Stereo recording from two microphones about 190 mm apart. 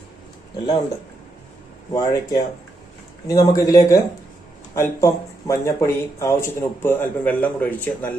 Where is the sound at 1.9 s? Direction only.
20° left (ahead or behind).